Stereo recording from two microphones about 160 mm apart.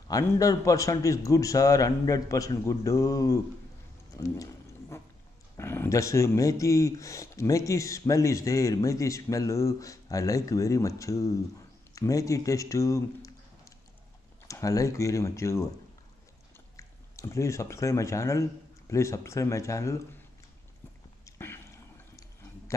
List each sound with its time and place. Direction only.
0.1 s speech: 20° left (ahead or behind)
4.2 s a sound: 20° left (ahead or behind)
5.6 s speech: 15° left (ahead or behind)
16.7 s speech: 20° left (ahead or behind)
21.3 s chewing: 15° left (ahead or behind)